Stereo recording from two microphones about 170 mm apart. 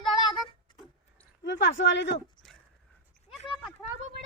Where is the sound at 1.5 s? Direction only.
90° left.